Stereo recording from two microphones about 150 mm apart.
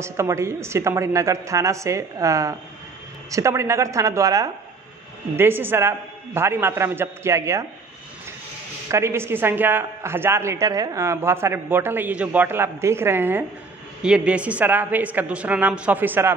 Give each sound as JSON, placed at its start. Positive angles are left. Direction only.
{"t": 0.0, "sound": "a woman's voice", "side_deg": -20}
{"t": 8.8, "sound": "a man's voice", "side_deg": -20}